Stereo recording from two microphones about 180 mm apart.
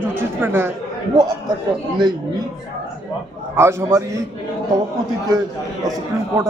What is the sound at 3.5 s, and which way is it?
Speech, 15° right (ahead or behind).